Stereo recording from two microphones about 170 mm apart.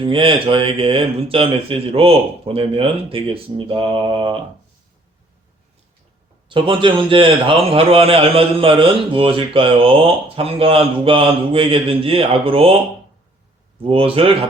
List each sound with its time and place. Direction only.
0.0 s a man's voice: 30° right (ahead or behind)
6.5 s a man's voice: 30° right (ahead or behind)
13.8 s a man's voice: 35° right (ahead or behind)